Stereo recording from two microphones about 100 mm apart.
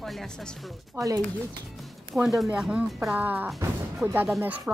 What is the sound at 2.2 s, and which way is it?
Speech, 5° right (ahead or behind).